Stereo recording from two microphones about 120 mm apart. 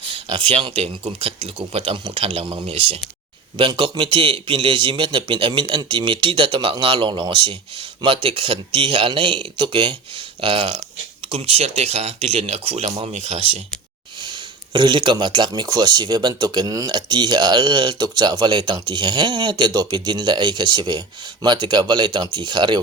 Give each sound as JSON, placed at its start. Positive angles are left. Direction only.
{"t": 0.0, "sound": "speech", "side_deg": -45}
{"t": 11.3, "sound": "speech", "side_deg": -55}
{"t": 14.2, "sound": "speech", "side_deg": -40}